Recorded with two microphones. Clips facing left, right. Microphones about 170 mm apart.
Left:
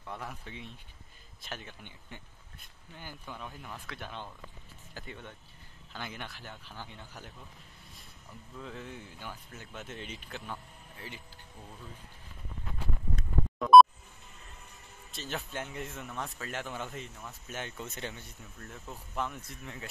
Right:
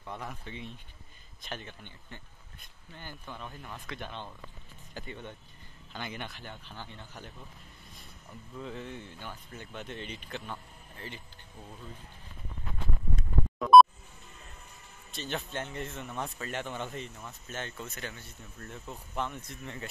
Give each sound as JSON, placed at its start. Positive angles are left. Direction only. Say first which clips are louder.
{"t": 0.0, "sound": "speech", "louder": "right 1 dB", "side_deg": 0}
{"t": 8.5, "sound": "speech", "louder": "right 3 dB", "side_deg": 0}
{"t": 13.6, "sound": "music", "louder": "even", "side_deg": 0}
{"t": 15.0, "sound": "speech", "louder": "right 2 dB", "side_deg": 0}
{"t": 18.6, "sound": "speech", "louder": "right 2 dB", "side_deg": 0}